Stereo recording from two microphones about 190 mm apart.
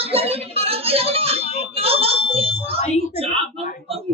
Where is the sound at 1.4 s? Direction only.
35° left (ahead or behind).